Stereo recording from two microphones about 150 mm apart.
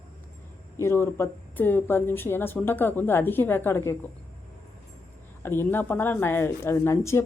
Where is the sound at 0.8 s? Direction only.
15° left (ahead or behind).